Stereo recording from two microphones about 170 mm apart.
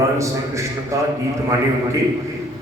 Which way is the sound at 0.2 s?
15° right (ahead or behind).